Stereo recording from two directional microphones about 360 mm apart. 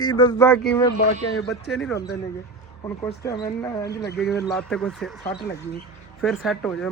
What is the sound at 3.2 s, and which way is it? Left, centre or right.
Speech, centre.